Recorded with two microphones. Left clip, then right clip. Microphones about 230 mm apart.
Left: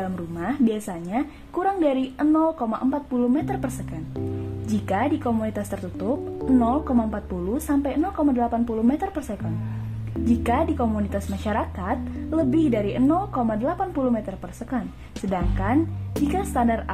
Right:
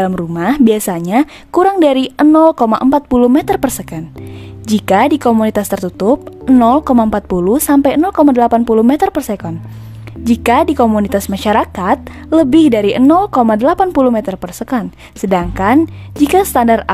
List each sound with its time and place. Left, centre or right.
0.0 s speech: right
4.8 s speech: right